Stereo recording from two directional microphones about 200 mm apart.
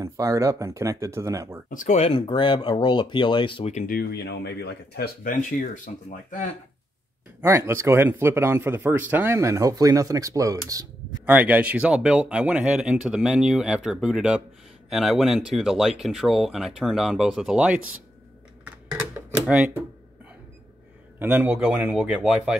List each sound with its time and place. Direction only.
0.0 s speech: 15° right (ahead or behind)
1.7 s speech: 40° left (ahead or behind)
3.8 s speech: 50° left (ahead or behind)
7.4 s speech: 15° right (ahead or behind)
18.6 s a sound: 10° right (ahead or behind)
21.2 s speech: 10° right (ahead or behind)